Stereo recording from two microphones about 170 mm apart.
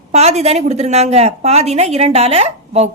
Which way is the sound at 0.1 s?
40° right (ahead or behind).